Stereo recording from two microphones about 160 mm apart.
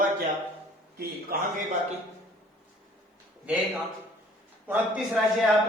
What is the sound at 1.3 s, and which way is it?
Speech, 70° right (ahead or behind).